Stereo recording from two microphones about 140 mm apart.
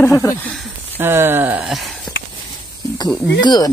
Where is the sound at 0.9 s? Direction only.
15° right (ahead or behind).